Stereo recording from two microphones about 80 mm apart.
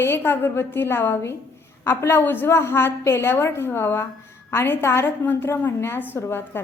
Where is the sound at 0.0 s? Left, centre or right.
Left.